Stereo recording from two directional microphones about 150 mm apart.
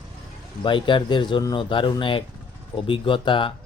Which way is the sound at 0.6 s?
35° left (ahead or behind).